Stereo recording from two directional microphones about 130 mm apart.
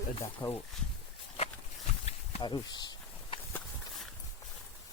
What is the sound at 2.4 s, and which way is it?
Speech, 35° left (ahead or behind).